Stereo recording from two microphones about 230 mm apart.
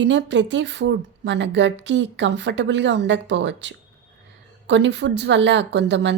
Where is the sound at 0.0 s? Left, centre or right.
Right.